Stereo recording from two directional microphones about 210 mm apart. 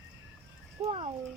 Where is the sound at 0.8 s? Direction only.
25° right (ahead or behind).